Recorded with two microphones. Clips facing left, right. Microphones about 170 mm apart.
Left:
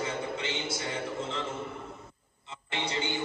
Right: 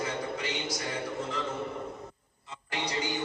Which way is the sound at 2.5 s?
25° left (ahead or behind).